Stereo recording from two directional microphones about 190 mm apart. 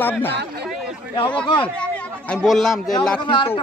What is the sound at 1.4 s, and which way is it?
Speech, 25° left (ahead or behind).